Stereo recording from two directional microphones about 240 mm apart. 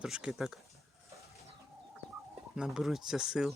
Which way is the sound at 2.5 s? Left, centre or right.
Centre.